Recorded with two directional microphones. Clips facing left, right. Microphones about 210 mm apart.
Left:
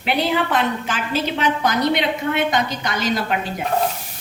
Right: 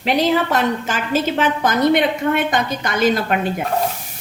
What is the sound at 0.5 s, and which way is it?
A woman's voice, 45° right (ahead or behind).